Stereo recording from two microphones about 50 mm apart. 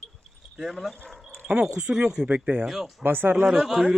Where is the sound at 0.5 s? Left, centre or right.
Centre.